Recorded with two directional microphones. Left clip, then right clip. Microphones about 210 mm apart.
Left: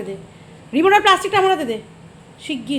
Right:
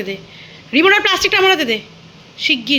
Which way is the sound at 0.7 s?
5° right (ahead or behind).